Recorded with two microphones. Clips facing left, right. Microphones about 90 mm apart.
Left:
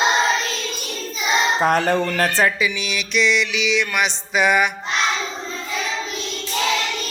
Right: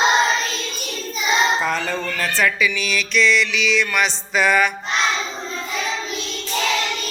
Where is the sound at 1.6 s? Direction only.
55° left (ahead or behind).